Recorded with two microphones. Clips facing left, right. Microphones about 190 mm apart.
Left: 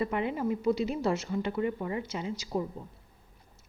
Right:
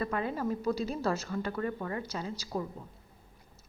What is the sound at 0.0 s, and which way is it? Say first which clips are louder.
A woman's voice: left 2 dB; 20° left (ahead or behind).